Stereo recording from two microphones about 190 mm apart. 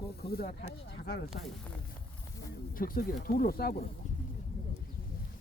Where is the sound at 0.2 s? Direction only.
55° left (ahead or behind).